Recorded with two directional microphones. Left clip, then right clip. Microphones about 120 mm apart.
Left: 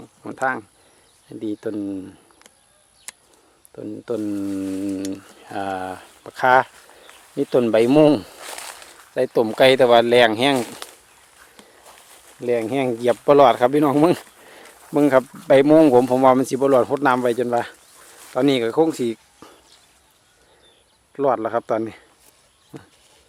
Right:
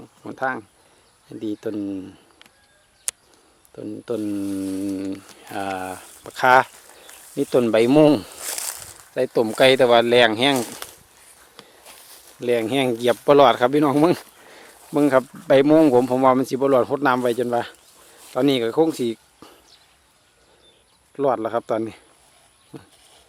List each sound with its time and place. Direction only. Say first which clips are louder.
0.0 s a sound: left 2 dB; centre (ahead or behind)
1.3 s speech: left 1 dB; centre (ahead or behind)
3.8 s speech: left 1 dB; centre (ahead or behind)
8.4 s a sound: right 2 dB; 30° right (ahead or behind)
9.1 s speech: left 1 dB; centre (ahead or behind)
10.6 s speech: left 1 dB; 25° right (ahead or behind)
12.4 s speech: right 1 dB; 10° right (ahead or behind)
21.1 s speech: left 1 dB; 5° right (ahead or behind)